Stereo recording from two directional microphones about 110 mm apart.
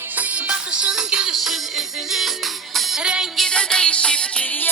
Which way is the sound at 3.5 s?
5° left (ahead or behind).